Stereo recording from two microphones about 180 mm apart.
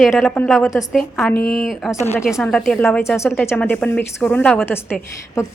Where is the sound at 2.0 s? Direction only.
15° left (ahead or behind).